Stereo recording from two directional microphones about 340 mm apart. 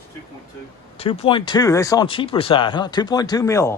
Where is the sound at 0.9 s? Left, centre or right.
Centre.